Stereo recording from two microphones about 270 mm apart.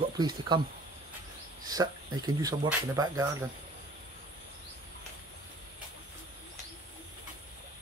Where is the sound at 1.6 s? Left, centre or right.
Centre.